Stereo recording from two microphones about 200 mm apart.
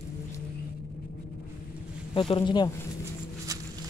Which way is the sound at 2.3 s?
20° left (ahead or behind).